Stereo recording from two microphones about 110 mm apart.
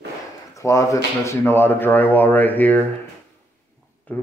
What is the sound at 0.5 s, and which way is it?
Speech, 30° left (ahead or behind).